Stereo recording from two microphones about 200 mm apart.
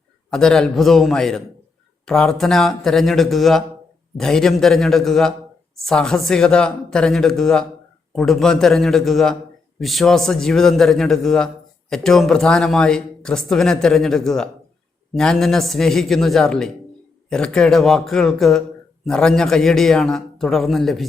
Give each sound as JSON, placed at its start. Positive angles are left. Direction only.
{"t": 0.3, "sound": "a man's voice", "side_deg": 5}